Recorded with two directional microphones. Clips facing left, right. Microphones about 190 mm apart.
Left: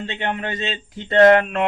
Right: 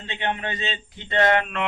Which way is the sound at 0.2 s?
45° left (ahead or behind).